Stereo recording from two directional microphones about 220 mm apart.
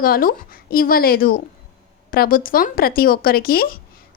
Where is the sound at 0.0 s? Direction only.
40° left (ahead or behind).